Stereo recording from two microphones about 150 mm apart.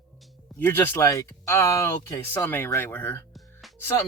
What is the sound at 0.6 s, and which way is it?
Speech, 15° left (ahead or behind).